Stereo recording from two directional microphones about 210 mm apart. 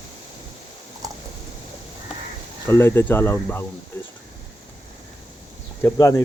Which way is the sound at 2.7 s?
10° left (ahead or behind).